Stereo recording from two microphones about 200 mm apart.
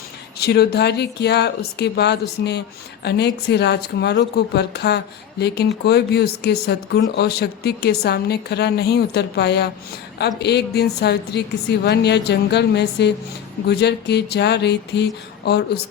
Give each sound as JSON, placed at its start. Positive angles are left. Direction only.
{"t": 0.3, "sound": "speech", "side_deg": 55}